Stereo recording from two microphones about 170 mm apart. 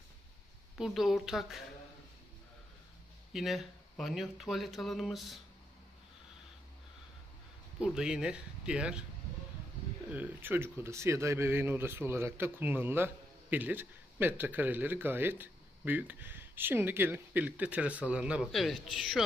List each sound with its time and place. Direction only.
0.7 s speech: centre (ahead or behind)
3.3 s speech: centre (ahead or behind)
7.8 s speech: 5° right (ahead or behind)
10.1 s speech: 10° right (ahead or behind)